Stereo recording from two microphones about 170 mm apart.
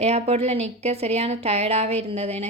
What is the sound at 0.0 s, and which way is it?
A woman's voice, 40° right (ahead or behind).